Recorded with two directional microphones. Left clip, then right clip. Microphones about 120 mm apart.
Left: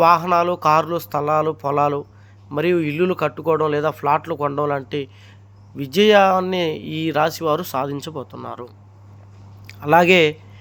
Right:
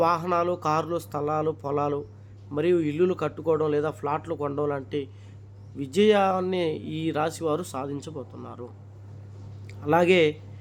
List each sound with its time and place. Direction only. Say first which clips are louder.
0.0 s a man's voice: left 9 dB; 25° left (ahead or behind); by 8.6 s 45° left (ahead or behind)
9.6 s speech: left 7 dB; 30° left (ahead or behind)